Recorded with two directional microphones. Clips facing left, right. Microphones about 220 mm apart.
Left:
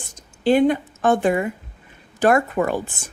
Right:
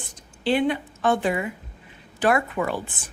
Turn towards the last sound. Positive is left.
turn(degrees=45)  # may be behind; listen again after turning